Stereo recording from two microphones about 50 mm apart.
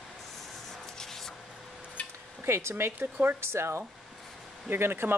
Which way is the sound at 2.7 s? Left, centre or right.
Right.